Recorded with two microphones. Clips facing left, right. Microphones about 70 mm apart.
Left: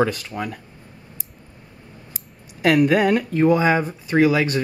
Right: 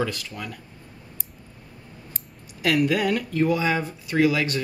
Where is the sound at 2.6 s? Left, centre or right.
Left.